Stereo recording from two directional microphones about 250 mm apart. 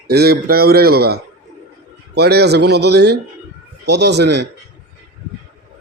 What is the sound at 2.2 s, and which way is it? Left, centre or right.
Speech, right.